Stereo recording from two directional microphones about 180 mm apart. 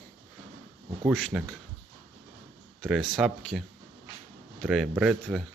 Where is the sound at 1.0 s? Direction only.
Centre (ahead or behind).